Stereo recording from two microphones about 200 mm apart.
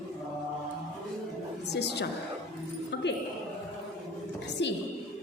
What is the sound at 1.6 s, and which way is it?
Speech, 55° left (ahead or behind).